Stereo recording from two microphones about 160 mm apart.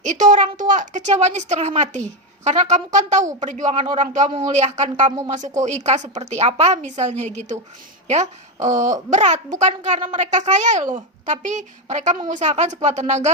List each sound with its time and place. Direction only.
0.0 s a woman's voice: 50° right (ahead or behind)
0.4 s a sound: 25° right (ahead or behind)
0.7 s a woman's voice: 50° right (ahead or behind)